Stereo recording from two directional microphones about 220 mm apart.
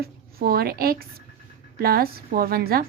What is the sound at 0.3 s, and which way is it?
A woman's voice, 45° right (ahead or behind).